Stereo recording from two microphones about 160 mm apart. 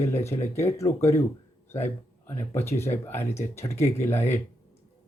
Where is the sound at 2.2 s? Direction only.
15° left (ahead or behind).